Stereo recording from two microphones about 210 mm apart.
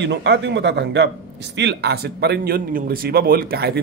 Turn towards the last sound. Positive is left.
turn(degrees=-45)  # may be behind; listen again after turning